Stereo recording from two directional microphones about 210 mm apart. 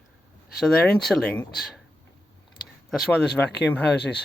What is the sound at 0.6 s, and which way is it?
Speech, 5° left (ahead or behind).